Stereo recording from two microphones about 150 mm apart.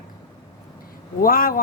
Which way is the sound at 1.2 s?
75° left (ahead or behind).